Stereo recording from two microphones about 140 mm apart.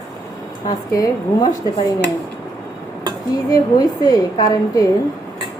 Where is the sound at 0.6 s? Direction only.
25° left (ahead or behind).